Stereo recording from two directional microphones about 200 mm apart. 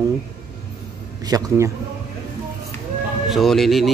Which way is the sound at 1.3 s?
20° right (ahead or behind).